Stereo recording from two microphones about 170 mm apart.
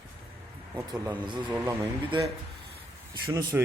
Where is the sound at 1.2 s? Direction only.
25° right (ahead or behind).